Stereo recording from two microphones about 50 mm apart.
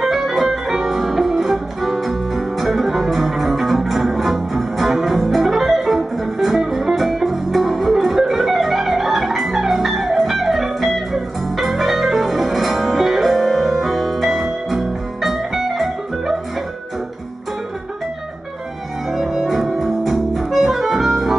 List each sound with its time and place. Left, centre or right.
0.0 s music: centre
19.1 s music: centre